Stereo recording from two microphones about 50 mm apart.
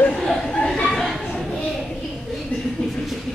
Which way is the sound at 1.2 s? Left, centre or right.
Centre.